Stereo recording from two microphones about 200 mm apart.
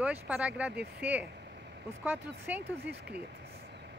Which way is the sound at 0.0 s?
5° right (ahead or behind).